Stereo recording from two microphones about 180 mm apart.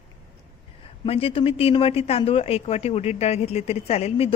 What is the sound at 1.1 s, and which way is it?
Speech, 35° left (ahead or behind).